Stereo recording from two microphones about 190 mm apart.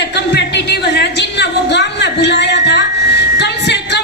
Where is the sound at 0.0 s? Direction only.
65° left (ahead or behind).